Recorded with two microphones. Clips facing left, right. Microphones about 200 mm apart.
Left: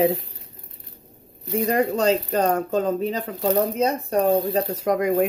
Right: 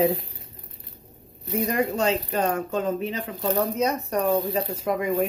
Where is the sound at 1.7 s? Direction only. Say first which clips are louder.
Left 4 dB; 40° left (ahead or behind).